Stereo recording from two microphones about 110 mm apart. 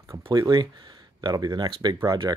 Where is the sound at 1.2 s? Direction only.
40° right (ahead or behind).